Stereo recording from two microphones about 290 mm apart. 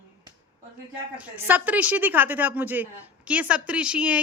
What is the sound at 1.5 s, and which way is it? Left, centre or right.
A woman's voice, centre.